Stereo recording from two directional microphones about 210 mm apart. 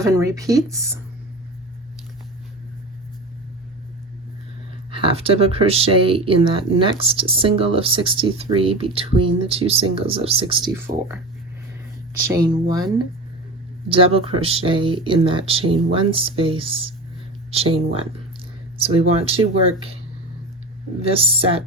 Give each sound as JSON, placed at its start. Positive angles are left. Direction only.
{"t": 0.0, "sound": "speech", "side_deg": -15}
{"t": 4.9, "sound": "speech", "side_deg": -25}
{"t": 12.2, "sound": "speech", "side_deg": -15}
{"t": 21.0, "sound": "speech", "side_deg": -25}